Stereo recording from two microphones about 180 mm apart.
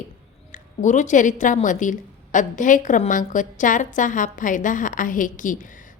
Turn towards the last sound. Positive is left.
turn(degrees=45)  # may be behind; listen again after turning